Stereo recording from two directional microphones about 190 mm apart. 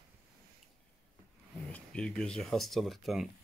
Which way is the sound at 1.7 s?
5° left (ahead or behind).